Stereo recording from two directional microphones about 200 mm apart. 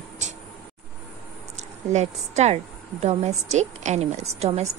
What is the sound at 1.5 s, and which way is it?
A woman's voice, 35° right (ahead or behind).